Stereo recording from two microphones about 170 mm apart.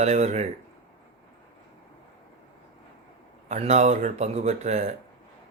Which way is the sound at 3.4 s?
40° right (ahead or behind).